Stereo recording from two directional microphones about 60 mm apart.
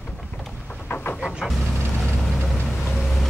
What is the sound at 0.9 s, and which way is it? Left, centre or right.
Train, left.